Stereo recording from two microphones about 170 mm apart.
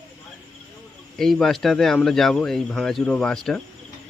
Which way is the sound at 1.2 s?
Centre (ahead or behind).